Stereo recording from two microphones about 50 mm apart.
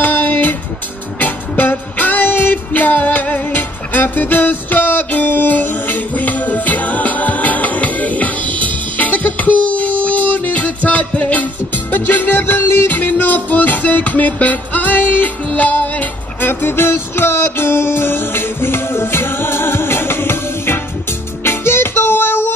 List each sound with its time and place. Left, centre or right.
0.0 s music: left